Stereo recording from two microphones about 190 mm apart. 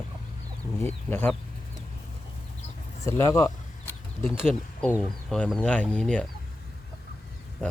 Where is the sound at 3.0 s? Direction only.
15° left (ahead or behind).